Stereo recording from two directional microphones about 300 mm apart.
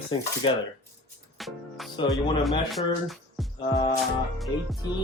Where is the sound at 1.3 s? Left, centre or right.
Centre.